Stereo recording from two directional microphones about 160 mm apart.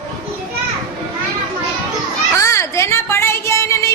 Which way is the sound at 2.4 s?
20° left (ahead or behind).